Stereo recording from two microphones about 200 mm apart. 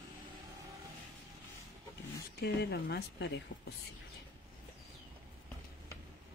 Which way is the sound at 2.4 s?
50° left (ahead or behind).